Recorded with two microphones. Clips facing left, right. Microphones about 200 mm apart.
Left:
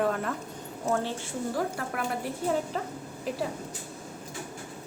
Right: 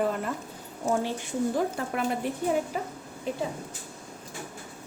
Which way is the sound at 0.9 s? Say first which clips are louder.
Right 2 dB; 15° right (ahead or behind).